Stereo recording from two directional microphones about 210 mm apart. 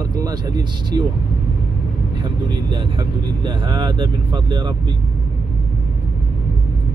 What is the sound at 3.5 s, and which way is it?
Speech, 20° right (ahead or behind).